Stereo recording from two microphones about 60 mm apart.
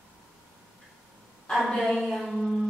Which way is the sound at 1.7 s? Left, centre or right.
Centre.